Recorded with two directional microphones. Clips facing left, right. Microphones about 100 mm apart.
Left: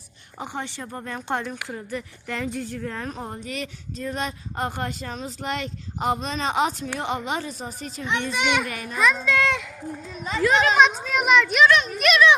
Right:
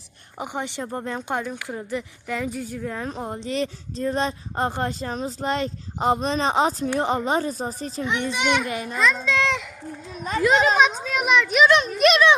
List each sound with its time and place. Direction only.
0.3 s speech: 15° right (ahead or behind)
1.3 s a woman's voice: 10° right (ahead or behind)
1.7 s speech: 20° right (ahead or behind)
2.2 s a woman's voice: 5° right (ahead or behind)
3.5 s speech: 30° right (ahead or behind)
8.0 s a woman's voice: 15° right (ahead or behind)
8.3 s a child's voice: centre (ahead or behind)
8.6 s speech: 25° right (ahead or behind)
10.4 s speech: 20° right (ahead or behind)
10.8 s a child's voice: centre (ahead or behind)
11.7 s speech: 30° right (ahead or behind)